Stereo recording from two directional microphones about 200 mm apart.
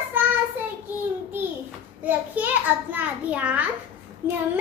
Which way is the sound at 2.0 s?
10° right (ahead or behind).